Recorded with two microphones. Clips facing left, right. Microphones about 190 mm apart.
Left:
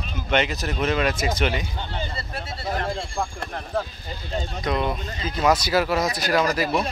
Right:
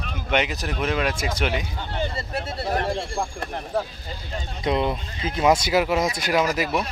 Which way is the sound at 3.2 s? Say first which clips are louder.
Right 1 dB; 10° right (ahead or behind).